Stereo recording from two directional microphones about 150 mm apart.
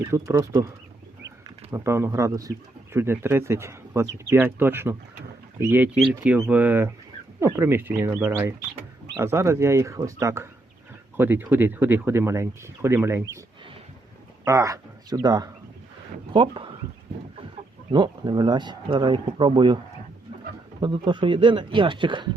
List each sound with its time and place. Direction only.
0.1 s speech: 20° right (ahead or behind)
1.7 s speech: 15° right (ahead or behind)
14.4 s speech: 20° right (ahead or behind)
17.9 s speech: 30° right (ahead or behind)
20.8 s speech: 30° right (ahead or behind)